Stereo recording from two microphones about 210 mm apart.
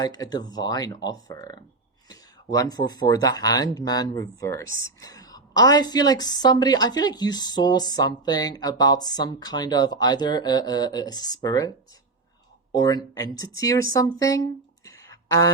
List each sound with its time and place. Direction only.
0.0 s a woman's voice: 20° left (ahead or behind)
12.7 s speech: 15° left (ahead or behind)
14.2 s a sound: 15° left (ahead or behind)